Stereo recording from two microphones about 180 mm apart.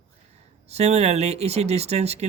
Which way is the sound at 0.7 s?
35° right (ahead or behind).